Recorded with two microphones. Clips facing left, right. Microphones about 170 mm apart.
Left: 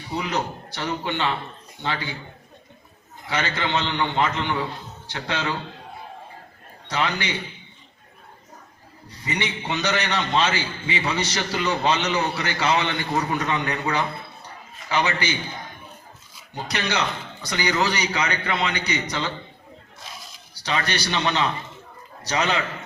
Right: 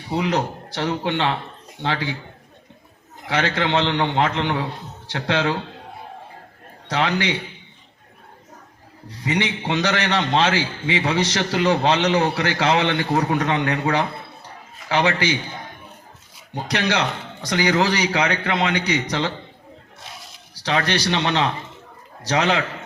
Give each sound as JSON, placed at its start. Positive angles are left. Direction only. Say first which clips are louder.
{"t": 0.2, "sound": "a man's voice", "louder": "right 5 dB", "side_deg": -90}
{"t": 3.2, "sound": "a man's voice", "louder": "right 4 dB", "side_deg": -90}
{"t": 6.8, "sound": "a man's voice", "louder": "right 4 dB", "side_deg": -90}
{"t": 9.0, "sound": "a man's voice", "louder": "right 5 dB", "side_deg": -90}
{"t": 16.6, "sound": "a man's voice", "louder": "right 4 dB", "side_deg": -90}
{"t": 20.1, "sound": "a man's voice", "louder": "even", "side_deg": -70}